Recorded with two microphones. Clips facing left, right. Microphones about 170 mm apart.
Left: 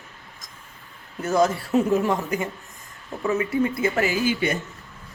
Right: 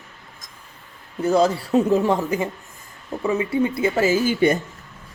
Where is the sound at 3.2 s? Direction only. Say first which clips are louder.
Right 1 dB; 15° right (ahead or behind).